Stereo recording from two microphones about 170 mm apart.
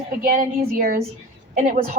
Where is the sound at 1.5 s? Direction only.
50° right (ahead or behind).